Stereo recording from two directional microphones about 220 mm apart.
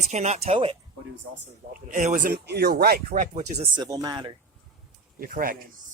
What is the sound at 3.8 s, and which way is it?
Speech, 20° right (ahead or behind).